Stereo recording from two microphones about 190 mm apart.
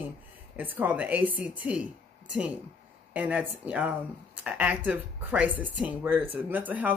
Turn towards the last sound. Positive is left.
turn(degrees=-10)  # may be behind; listen again after turning